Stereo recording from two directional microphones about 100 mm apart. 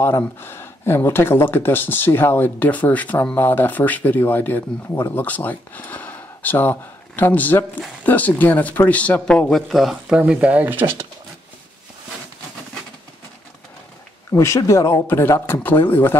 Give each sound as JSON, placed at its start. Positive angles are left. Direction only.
{"t": 0.0, "sound": "speech", "side_deg": 20}
{"t": 14.3, "sound": "speech", "side_deg": 30}